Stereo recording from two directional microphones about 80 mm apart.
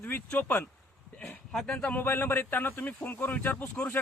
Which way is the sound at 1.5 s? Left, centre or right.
Centre.